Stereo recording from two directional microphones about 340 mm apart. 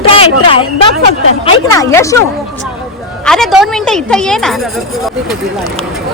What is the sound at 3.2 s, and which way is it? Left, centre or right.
A woman's voice, centre.